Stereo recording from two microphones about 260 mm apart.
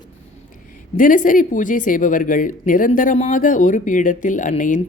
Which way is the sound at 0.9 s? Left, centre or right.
Left.